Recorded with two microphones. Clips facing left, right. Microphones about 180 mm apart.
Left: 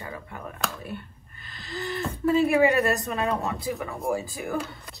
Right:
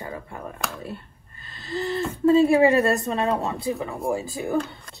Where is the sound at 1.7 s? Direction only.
30° right (ahead or behind).